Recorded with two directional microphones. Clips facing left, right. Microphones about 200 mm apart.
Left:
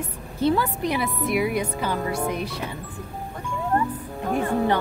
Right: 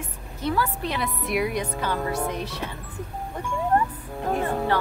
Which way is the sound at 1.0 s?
Centre (ahead or behind).